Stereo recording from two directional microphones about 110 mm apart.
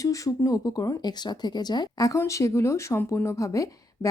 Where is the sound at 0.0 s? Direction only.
30° left (ahead or behind).